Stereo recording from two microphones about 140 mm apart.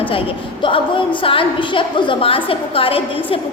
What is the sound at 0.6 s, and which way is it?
A woman's voice, 35° left (ahead or behind).